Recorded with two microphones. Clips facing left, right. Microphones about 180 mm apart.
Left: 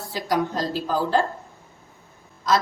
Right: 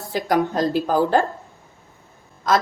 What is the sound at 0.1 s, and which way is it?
A woman's voice, 55° right (ahead or behind).